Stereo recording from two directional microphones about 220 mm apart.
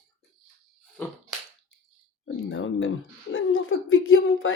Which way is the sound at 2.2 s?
60° left (ahead or behind).